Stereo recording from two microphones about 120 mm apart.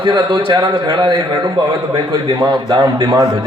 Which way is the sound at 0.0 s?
40° right (ahead or behind).